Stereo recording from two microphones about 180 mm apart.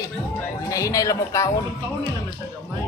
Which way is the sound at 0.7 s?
20° left (ahead or behind).